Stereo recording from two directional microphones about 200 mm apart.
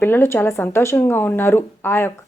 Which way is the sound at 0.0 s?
10° left (ahead or behind).